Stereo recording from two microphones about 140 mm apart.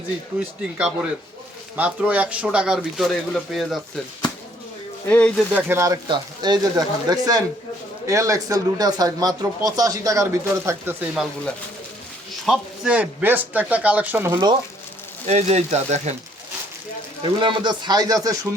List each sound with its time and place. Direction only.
0.6 s speech: 5° right (ahead or behind)
5.0 s speech: 10° left (ahead or behind)
5.5 s speech: 15° right (ahead or behind)
6.1 s speech: 30° right (ahead or behind)
12.5 s speech: 5° right (ahead or behind)
15.3 s speech: 50° right (ahead or behind)
17.4 s speech: 35° right (ahead or behind)